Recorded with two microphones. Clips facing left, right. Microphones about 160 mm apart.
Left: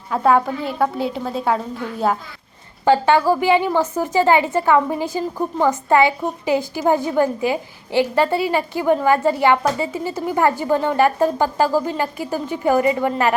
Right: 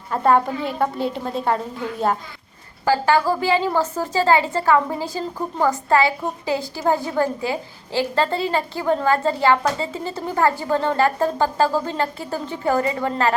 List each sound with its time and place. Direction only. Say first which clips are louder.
0.1 s a woman's voice: left 1 dB; centre (ahead or behind)
2.8 s a woman's voice: left 3 dB; 20° left (ahead or behind)